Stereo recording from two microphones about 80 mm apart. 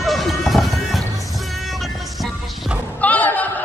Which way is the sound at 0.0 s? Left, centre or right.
Centre.